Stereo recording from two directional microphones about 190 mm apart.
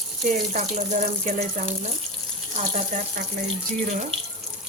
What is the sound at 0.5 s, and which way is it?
Speech, 40° right (ahead or behind).